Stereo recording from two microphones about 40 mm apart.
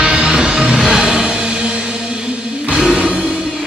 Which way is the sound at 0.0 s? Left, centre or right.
Centre.